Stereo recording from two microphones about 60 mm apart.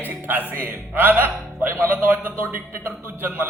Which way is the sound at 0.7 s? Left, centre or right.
Right.